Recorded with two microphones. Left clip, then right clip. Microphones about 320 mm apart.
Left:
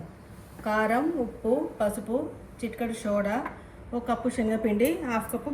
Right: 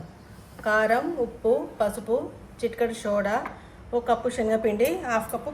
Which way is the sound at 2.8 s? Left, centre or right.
Right.